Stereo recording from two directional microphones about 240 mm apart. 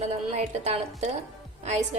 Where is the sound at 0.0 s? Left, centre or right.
Right.